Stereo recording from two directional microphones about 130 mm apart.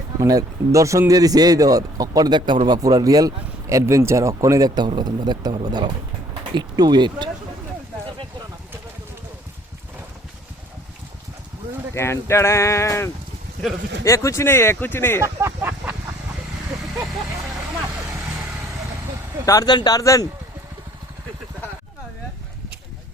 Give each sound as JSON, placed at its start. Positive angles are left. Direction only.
{"t": 0.2, "sound": "speech", "side_deg": -25}
{"t": 11.9, "sound": "speech", "side_deg": 20}
{"t": 15.2, "sound": "a sound", "side_deg": -20}
{"t": 19.5, "sound": "speech", "side_deg": 30}